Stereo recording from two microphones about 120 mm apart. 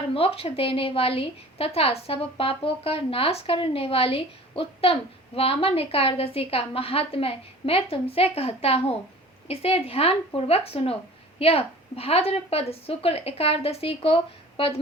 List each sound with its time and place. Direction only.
0.1 s a woman's voice: 50° left (ahead or behind)